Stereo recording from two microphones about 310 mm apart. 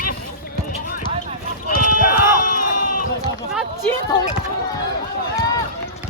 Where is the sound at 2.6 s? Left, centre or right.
Left.